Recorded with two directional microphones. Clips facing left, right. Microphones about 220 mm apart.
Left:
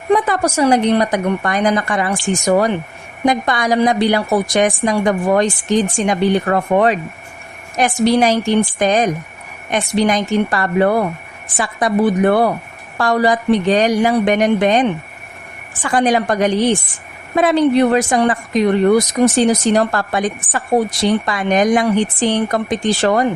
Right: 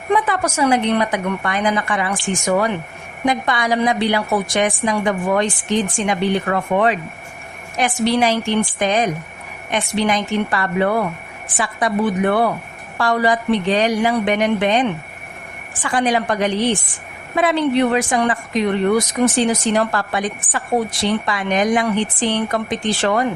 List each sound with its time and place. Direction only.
0.1 s a woman's voice: 35° left (ahead or behind)